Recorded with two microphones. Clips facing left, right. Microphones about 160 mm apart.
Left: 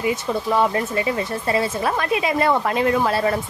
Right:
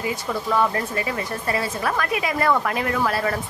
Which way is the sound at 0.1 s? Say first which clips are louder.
Left 3 dB; 20° left (ahead or behind).